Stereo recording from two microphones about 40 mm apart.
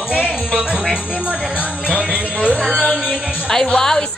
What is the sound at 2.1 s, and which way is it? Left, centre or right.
Music, right.